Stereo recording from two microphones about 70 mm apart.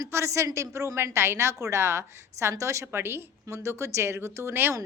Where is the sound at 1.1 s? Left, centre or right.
Right.